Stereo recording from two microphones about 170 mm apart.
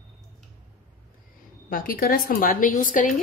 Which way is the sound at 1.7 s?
55° left (ahead or behind).